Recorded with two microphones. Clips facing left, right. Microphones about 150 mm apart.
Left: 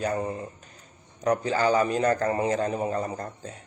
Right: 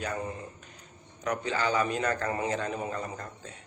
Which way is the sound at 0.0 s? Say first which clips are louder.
Left 6 dB; 35° left (ahead or behind).